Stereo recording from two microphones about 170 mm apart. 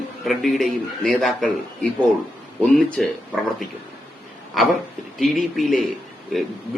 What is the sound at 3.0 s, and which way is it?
Speech, 5° left (ahead or behind).